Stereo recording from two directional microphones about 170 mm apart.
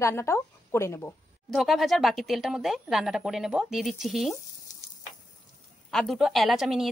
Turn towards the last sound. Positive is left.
turn(degrees=0)  # may be behind; listen again after turning